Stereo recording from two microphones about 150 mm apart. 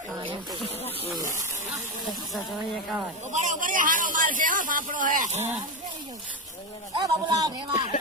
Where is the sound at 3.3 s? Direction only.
55° right (ahead or behind).